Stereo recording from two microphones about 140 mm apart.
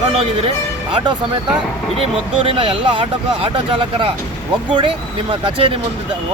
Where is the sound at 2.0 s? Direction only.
40° right (ahead or behind).